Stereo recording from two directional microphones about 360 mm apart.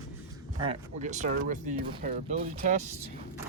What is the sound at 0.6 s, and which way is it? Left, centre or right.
Speech, centre.